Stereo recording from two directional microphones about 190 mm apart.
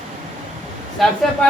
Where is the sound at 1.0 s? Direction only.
Centre (ahead or behind).